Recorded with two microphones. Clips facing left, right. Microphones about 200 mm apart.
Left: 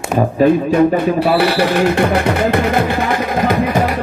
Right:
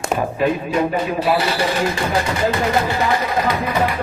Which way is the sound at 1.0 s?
60° left (ahead or behind).